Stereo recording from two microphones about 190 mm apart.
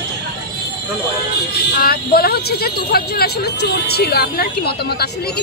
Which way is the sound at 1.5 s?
55° left (ahead or behind).